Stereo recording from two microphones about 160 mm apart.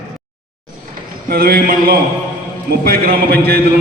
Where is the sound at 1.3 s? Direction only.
70° right (ahead or behind).